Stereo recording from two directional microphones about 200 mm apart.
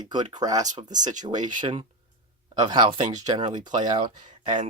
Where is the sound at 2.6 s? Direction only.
20° right (ahead or behind).